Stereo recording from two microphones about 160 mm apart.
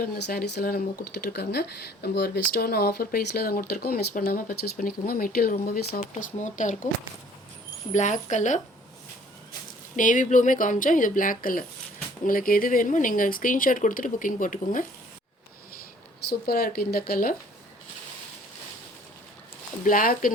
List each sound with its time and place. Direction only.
0.0 s speech: 70° left (ahead or behind)
6.0 s speech: 50° left (ahead or behind)
7.9 s speech: 50° left (ahead or behind)
9.9 s speech: 55° left (ahead or behind)
16.5 s speech: 70° left (ahead or behind)
19.8 s speech: 60° left (ahead or behind)